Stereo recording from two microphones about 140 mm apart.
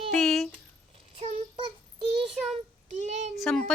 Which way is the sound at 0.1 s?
Centre (ahead or behind).